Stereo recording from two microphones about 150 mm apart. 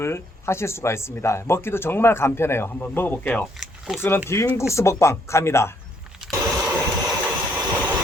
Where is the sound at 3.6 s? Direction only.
Centre (ahead or behind).